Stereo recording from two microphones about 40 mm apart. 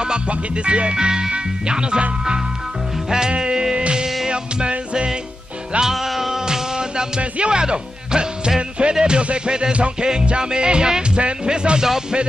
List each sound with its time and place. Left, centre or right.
0.0 s music: right
5.9 s music: centre
7.2 s speech: right
8.9 s music: right